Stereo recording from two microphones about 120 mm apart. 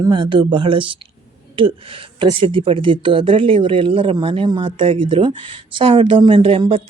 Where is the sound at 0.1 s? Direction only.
40° right (ahead or behind).